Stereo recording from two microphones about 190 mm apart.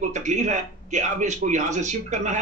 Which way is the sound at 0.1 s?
40° right (ahead or behind).